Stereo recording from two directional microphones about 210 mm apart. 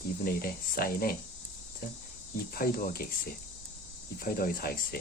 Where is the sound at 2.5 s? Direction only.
45° left (ahead or behind).